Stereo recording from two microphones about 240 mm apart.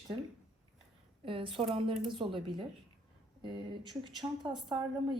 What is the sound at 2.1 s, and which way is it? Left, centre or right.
A woman's voice, right.